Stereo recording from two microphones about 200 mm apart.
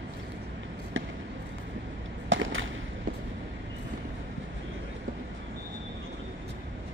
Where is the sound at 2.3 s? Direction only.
75° right (ahead or behind).